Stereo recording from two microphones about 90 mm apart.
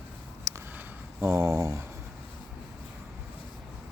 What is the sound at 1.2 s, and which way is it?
Speech, 35° right (ahead or behind).